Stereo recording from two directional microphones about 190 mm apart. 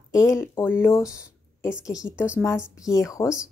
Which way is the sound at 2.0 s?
5° right (ahead or behind).